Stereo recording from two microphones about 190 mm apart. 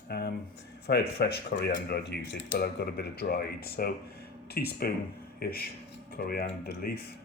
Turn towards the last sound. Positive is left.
turn(degrees=50)  # may be behind; listen again after turning